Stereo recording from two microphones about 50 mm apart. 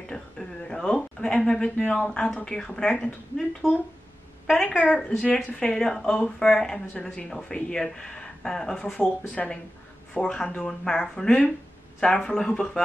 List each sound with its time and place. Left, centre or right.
0.1 s a sound: centre
2.1 s speech: centre
4.6 s speech: left
5.7 s speech: centre
9.0 s speech: left
10.1 s speech: centre